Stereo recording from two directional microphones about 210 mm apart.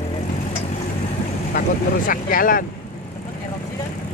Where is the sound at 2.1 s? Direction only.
40° left (ahead or behind).